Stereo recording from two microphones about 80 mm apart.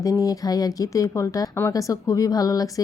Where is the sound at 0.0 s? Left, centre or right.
Left.